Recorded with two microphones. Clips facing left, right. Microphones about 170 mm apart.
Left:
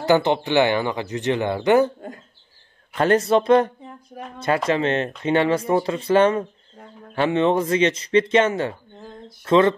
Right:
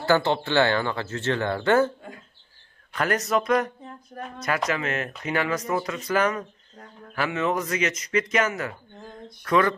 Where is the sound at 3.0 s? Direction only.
30° left (ahead or behind).